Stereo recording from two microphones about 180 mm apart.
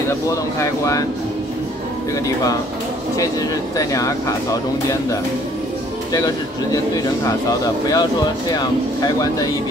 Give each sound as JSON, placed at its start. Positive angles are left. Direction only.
{"t": 0.1, "sound": "speech", "side_deg": 15}
{"t": 3.2, "sound": "speech", "side_deg": 20}